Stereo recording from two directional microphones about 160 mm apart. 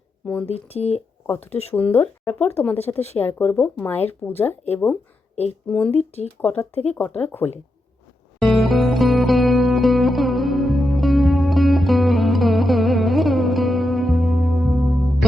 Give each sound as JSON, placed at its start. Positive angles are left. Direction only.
{"t": 0.4, "sound": "speech", "side_deg": 40}
{"t": 1.7, "sound": "speech", "side_deg": 10}
{"t": 6.0, "sound": "speech", "side_deg": 40}
{"t": 7.2, "sound": "speech", "side_deg": 10}
{"t": 8.4, "sound": "music", "side_deg": 0}